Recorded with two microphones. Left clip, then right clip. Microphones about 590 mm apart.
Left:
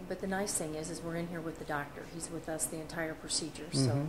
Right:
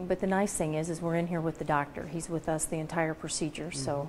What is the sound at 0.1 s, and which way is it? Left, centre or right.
A woman's voice, right.